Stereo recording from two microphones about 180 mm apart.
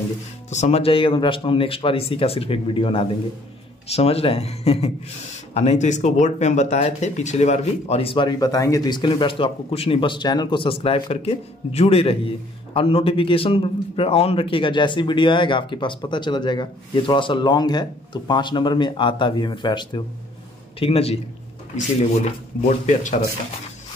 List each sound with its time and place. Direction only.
0.5 s a man's voice: 40° left (ahead or behind)